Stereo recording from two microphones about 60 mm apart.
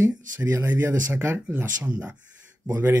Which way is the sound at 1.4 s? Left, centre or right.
Right.